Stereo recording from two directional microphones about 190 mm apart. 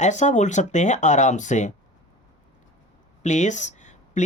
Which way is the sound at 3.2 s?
40° left (ahead or behind).